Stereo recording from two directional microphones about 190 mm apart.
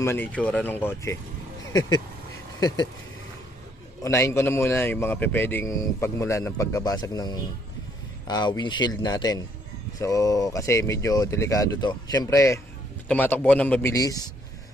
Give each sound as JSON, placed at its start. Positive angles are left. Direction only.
{"t": 0.0, "sound": "a man's voice", "side_deg": 10}
{"t": 4.0, "sound": "a man's voice", "side_deg": 15}